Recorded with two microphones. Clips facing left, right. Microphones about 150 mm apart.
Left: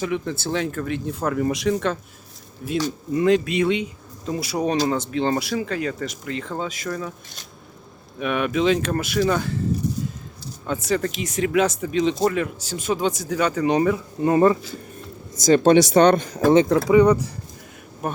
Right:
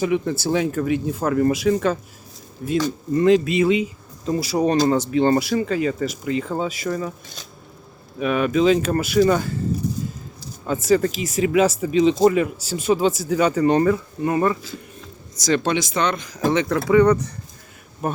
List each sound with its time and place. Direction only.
0.0 s speech: 5° right (ahead or behind)
8.2 s speech: centre (ahead or behind)
10.7 s speech: 5° right (ahead or behind)
14.2 s speech: 25° left (ahead or behind)
15.4 s speech: 45° left (ahead or behind)
16.6 s speech: 20° left (ahead or behind)